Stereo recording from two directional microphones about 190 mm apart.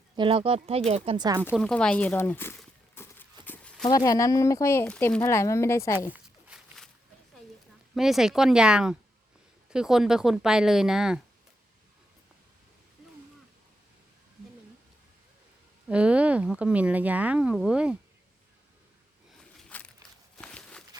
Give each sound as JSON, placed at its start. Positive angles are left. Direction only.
{"t": 0.2, "sound": "speech", "side_deg": -30}
{"t": 1.5, "sound": "speech", "side_deg": 5}
{"t": 2.9, "sound": "horse", "side_deg": 10}
{"t": 3.8, "sound": "speech", "side_deg": 20}
{"t": 6.1, "sound": "a sound", "side_deg": -5}
{"t": 7.9, "sound": "speech", "side_deg": 0}
{"t": 15.9, "sound": "speech", "side_deg": -5}
{"t": 19.5, "sound": "a sound", "side_deg": 5}